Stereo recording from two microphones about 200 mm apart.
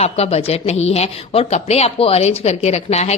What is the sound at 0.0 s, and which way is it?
A woman's voice, 30° left (ahead or behind).